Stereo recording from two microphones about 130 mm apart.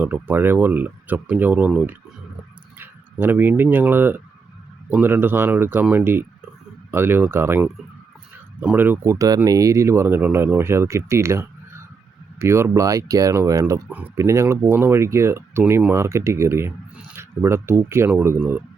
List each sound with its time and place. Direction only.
0.0 s speech: 15° right (ahead or behind)
6.9 s speech: 15° right (ahead or behind)
9.1 s speech: 25° right (ahead or behind)